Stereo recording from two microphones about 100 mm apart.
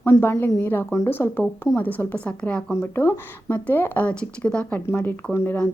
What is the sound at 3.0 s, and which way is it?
A woman's voice, 25° left (ahead or behind).